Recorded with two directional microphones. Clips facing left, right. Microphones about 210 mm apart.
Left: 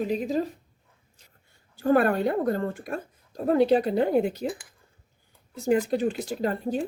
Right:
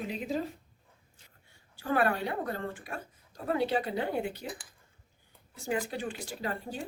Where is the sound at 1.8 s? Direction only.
45° left (ahead or behind).